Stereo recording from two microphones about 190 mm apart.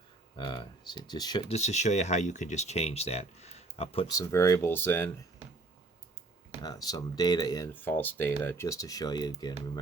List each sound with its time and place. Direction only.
0.3 s speech: 25° left (ahead or behind)
1.5 s speech: 35° left (ahead or behind)
4.1 s speech: 15° left (ahead or behind)
6.6 s speech: 20° left (ahead or behind)